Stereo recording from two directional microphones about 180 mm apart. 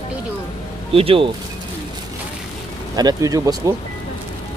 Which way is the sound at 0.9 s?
30° right (ahead or behind).